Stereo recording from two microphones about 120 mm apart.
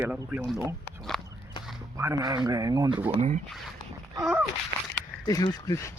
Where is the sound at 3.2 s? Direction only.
80° right.